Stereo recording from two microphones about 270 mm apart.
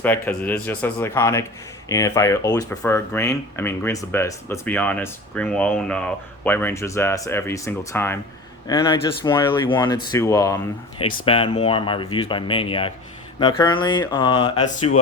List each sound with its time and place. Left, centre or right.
0.0 s speech: centre